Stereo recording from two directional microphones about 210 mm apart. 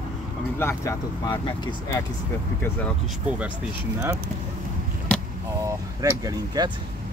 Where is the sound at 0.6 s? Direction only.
15° left (ahead or behind).